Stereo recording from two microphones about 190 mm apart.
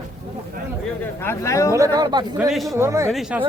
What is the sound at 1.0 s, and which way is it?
Speech, 10° left (ahead or behind).